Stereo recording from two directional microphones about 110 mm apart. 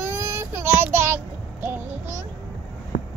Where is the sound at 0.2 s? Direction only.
20° right (ahead or behind).